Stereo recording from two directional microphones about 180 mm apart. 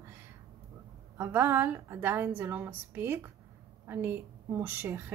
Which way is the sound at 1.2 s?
10° right (ahead or behind).